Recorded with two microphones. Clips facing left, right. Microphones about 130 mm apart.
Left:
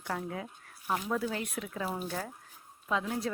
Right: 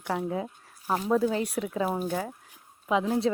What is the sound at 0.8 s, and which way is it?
Speech, 35° right (ahead or behind).